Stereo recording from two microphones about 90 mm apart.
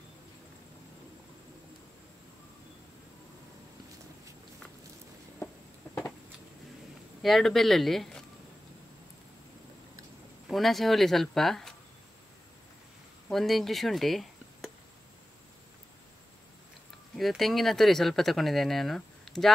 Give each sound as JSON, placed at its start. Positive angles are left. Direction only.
{"t": 7.2, "sound": "speech", "side_deg": 0}
{"t": 10.5, "sound": "speech", "side_deg": 0}
{"t": 13.3, "sound": "speech", "side_deg": 0}
{"t": 17.2, "sound": "speech", "side_deg": 0}